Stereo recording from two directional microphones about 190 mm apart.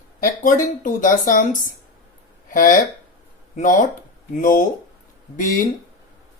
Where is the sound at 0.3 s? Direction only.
45° left (ahead or behind).